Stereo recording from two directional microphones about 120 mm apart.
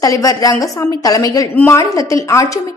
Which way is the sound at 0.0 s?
30° left (ahead or behind).